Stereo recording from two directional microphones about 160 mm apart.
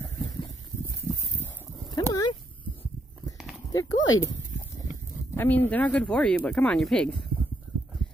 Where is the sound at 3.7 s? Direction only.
20° left (ahead or behind).